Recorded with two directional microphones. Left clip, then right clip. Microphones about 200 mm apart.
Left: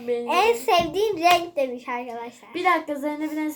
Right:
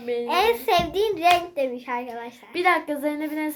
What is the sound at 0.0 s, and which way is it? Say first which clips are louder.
Speech: left 1 dB; 30° right (ahead or behind).